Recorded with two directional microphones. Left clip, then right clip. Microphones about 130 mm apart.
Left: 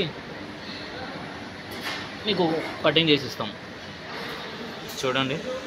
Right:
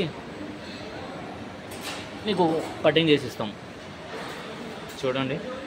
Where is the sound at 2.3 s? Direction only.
15° right (ahead or behind).